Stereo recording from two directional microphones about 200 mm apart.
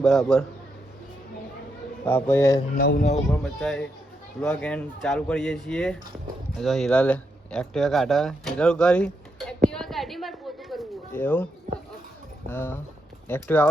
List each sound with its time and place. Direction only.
0.0 s speech: 5° left (ahead or behind)
2.0 s speech: 10° left (ahead or behind)
2.7 s speech: 50° left (ahead or behind)
3.3 s speech: 5° left (ahead or behind)
9.6 s a sound: centre (ahead or behind)
11.1 s speech: 10° left (ahead or behind)
12.5 s speech: 10° left (ahead or behind)